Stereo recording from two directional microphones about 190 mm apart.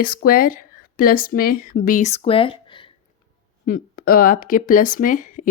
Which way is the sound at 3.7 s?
50° left (ahead or behind).